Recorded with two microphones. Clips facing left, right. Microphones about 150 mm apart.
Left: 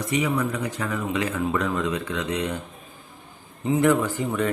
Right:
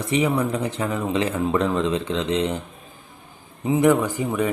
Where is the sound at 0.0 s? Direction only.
25° right (ahead or behind).